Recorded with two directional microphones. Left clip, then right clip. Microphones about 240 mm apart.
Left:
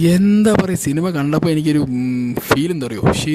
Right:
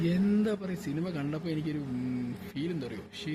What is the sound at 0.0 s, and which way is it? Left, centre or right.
Speech, left.